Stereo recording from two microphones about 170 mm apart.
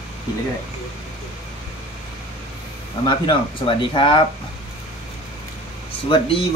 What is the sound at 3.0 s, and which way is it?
Speech, 30° left (ahead or behind).